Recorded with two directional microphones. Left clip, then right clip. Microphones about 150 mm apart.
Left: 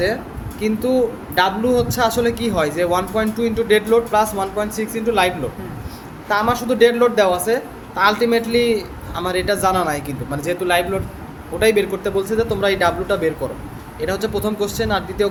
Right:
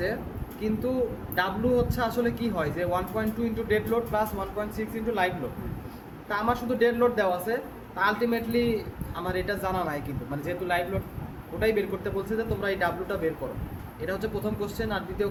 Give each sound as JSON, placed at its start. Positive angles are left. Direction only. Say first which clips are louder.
{"t": 0.6, "sound": "a man's voice", "louder": "left 10 dB", "side_deg": 55}